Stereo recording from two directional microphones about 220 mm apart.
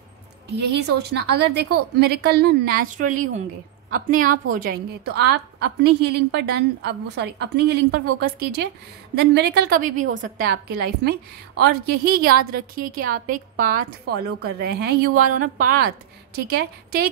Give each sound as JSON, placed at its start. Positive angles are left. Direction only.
{"t": 0.6, "sound": "a woman's voice", "side_deg": -50}